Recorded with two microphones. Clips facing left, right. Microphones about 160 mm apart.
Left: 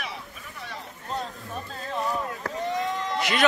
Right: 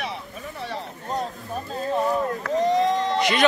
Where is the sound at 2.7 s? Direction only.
35° right (ahead or behind).